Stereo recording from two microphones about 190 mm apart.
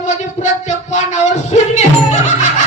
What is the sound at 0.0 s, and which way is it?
Music, 40° left (ahead or behind).